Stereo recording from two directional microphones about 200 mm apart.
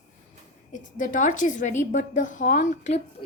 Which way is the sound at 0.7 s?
40° left (ahead or behind).